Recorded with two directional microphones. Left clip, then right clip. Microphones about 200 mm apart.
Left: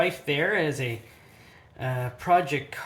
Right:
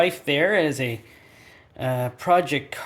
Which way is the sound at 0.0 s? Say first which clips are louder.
Right 4 dB; 50° right (ahead or behind).